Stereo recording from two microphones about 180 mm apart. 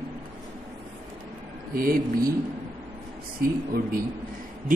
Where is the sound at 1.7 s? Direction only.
55° right (ahead or behind).